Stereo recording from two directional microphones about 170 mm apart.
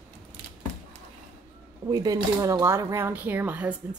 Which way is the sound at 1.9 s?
20° right (ahead or behind).